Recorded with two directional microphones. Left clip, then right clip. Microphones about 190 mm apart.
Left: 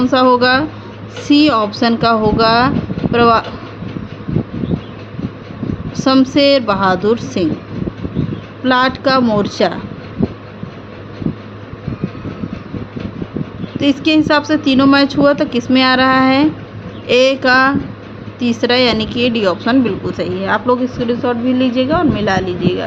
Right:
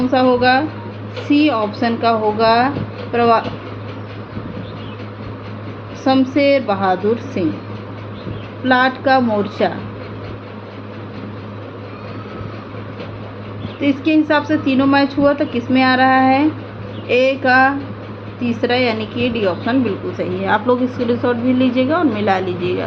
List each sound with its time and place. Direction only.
0.1 s a woman's voice: 50° left (ahead or behind)
6.0 s a woman's voice: 45° left (ahead or behind)
8.6 s a woman's voice: 45° left (ahead or behind)
13.7 s a woman's voice: 40° left (ahead or behind)
20.1 s a woman's voice: 25° left (ahead or behind)